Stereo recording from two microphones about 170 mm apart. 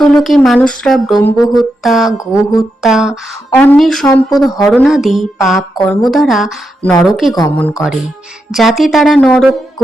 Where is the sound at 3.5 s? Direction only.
10° left (ahead or behind).